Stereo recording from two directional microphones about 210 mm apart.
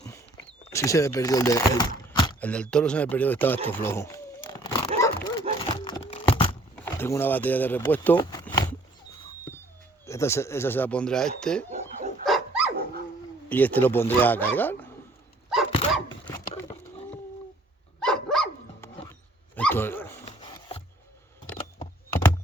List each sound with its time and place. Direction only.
0.7 s speech: 15° left (ahead or behind)
2.4 s speech: 5° left (ahead or behind)
3.7 s a sound: 10° left (ahead or behind)
6.7 s speech: 10° left (ahead or behind)
8.2 s a sound: 20° left (ahead or behind)
10.1 s speech: 15° left (ahead or behind)
12.2 s dog: centre (ahead or behind)
12.7 s dog: 45° right (ahead or behind)
13.5 s speech: 10° left (ahead or behind)
15.7 s a sound: 25° left (ahead or behind)
18.0 s dog: 5° left (ahead or behind)
20.2 s a sound: 25° left (ahead or behind)
21.5 s computer keyboard: 10° left (ahead or behind)